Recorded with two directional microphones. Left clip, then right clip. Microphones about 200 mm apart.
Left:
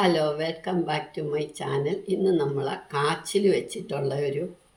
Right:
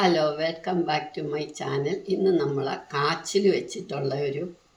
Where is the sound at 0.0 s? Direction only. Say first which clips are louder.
Right 1 dB; 5° left (ahead or behind).